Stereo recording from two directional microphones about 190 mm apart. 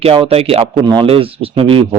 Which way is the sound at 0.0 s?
30° right (ahead or behind).